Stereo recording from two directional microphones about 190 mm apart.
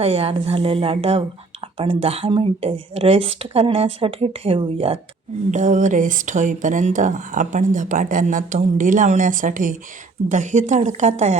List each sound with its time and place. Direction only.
0.0 s a woman's voice: 30° right (ahead or behind)
5.5 s a woman's voice: 40° right (ahead or behind)